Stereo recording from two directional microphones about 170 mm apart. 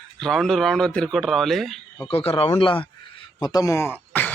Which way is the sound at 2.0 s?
35° left (ahead or behind).